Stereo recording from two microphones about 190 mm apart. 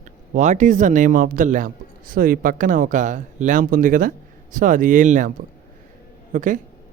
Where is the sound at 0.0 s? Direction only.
40° right (ahead or behind).